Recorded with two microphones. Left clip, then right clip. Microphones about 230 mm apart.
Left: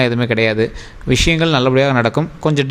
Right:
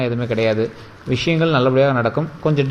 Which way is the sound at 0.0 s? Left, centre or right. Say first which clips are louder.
Left 4 dB; left.